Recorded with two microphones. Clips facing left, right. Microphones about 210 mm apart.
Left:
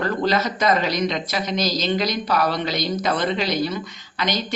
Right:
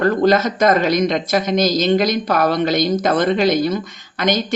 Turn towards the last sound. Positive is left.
turn(degrees=-50)  # may be behind; listen again after turning